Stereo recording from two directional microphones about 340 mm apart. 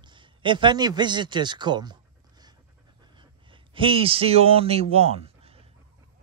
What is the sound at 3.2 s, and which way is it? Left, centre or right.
A man's voice, centre.